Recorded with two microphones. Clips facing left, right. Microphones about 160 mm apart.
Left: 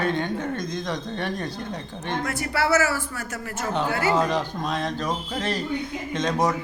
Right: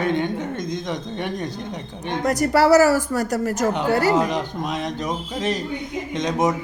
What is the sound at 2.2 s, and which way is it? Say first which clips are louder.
Speech: right 10 dB; 40° right (ahead or behind).